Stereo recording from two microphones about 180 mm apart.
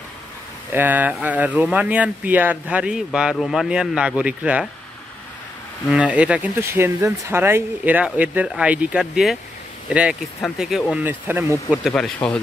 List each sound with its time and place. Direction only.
0.7 s speech: 10° right (ahead or behind)
5.9 s speech: 5° right (ahead or behind)
11.9 s speech: 5° left (ahead or behind)